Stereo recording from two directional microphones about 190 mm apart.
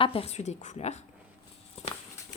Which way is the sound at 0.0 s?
30° left (ahead or behind).